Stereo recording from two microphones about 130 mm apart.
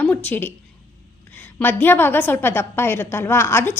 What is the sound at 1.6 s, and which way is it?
A woman's voice, 15° left (ahead or behind).